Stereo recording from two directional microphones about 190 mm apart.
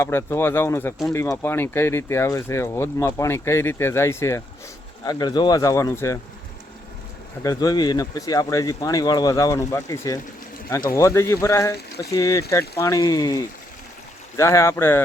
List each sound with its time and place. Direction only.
0.0 s speech: 15° left (ahead or behind)
7.4 s speech: 20° left (ahead or behind)
11.7 s speech: 60° left (ahead or behind)
12.1 s speech: 15° left (ahead or behind)